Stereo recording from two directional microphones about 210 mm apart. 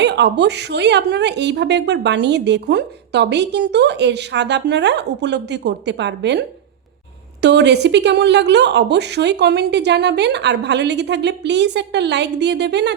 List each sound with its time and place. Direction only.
0.0 s a woman's voice: 55° right (ahead or behind)
7.4 s a woman's voice: 55° right (ahead or behind)